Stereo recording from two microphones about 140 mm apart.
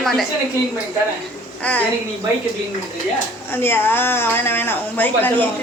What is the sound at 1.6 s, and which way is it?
Speech, 10° left (ahead or behind).